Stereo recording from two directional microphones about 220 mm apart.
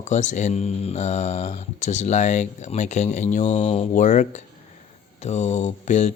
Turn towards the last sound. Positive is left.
turn(degrees=35)  # may be behind; listen again after turning